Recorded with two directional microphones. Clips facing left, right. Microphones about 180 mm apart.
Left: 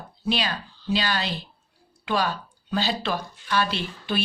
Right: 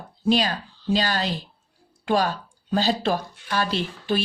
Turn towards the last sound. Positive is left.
turn(degrees=-40)  # may be behind; listen again after turning